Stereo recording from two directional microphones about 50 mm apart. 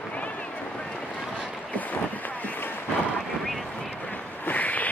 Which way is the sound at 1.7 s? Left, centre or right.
Left.